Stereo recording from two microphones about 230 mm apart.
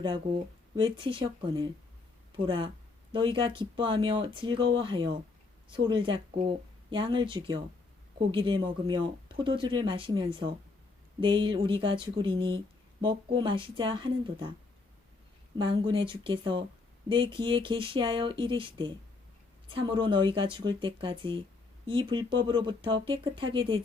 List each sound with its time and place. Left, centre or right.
0.0 s speech: right
15.5 s speech: right